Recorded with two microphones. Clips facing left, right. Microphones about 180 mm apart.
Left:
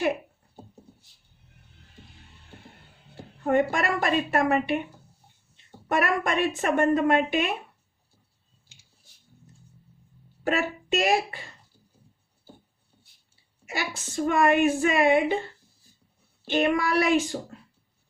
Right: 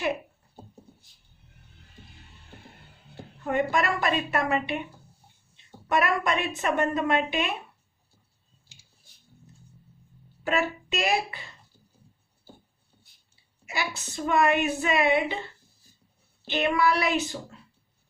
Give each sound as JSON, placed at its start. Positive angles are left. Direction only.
{"t": 3.4, "sound": "a woman's voice", "side_deg": 45}
{"t": 5.9, "sound": "a woman's voice", "side_deg": 45}
{"t": 10.4, "sound": "a woman's voice", "side_deg": 45}
{"t": 13.7, "sound": "a woman's voice", "side_deg": 45}
{"t": 16.5, "sound": "a woman's voice", "side_deg": 45}